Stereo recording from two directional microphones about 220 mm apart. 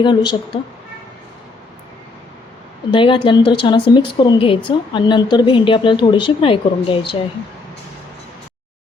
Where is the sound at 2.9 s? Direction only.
20° left (ahead or behind).